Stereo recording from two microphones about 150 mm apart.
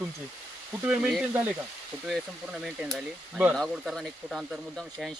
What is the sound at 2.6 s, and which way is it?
Speech, 5° right (ahead or behind).